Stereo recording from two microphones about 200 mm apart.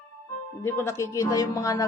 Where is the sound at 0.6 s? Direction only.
15° left (ahead or behind).